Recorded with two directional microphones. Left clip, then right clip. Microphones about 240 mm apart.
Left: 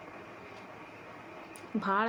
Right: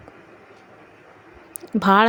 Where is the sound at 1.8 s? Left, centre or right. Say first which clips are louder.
Right 14 dB; right.